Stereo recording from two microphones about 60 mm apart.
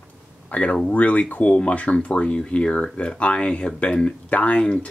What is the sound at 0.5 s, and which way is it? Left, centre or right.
Speech, left.